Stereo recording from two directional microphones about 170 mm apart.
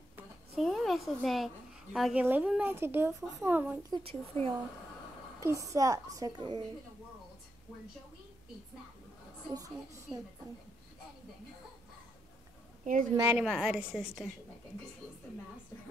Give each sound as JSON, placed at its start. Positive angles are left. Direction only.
{"t": 0.6, "sound": "a sound", "side_deg": 0}
{"t": 2.0, "sound": "a woman's voice", "side_deg": 0}
{"t": 3.9, "sound": "speech", "side_deg": -30}
{"t": 5.4, "sound": "a woman's voice", "side_deg": -20}
{"t": 9.5, "sound": "a woman's voice", "side_deg": -20}
{"t": 13.1, "sound": "a woman's voice", "side_deg": -10}